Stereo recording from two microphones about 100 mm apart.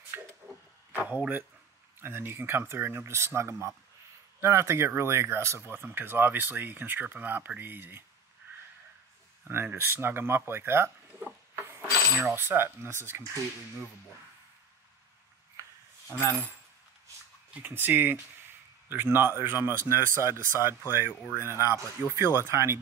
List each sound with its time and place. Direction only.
0.9 s speech: 15° right (ahead or behind)
9.4 s speech: 20° right (ahead or behind)
16.1 s speech: 25° left (ahead or behind)
17.6 s speech: 20° right (ahead or behind)